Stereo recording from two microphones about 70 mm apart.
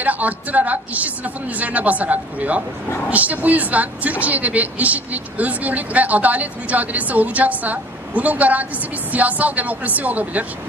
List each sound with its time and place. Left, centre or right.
0.0 s a woman's voice: right